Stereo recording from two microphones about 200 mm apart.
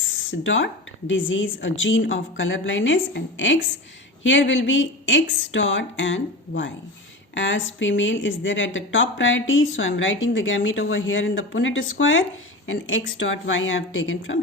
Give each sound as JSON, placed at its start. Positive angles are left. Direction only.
{"t": 0.0, "sound": "speech", "side_deg": 75}